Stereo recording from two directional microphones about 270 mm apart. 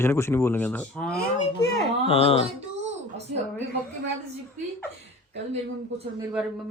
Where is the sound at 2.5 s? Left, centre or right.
Right.